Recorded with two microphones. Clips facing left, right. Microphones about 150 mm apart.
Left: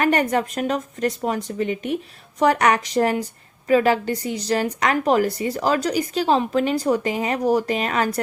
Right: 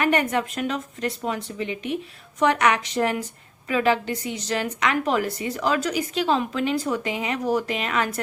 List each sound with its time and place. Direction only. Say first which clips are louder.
0.0 s a woman's voice: left 3 dB; 40° left (ahead or behind)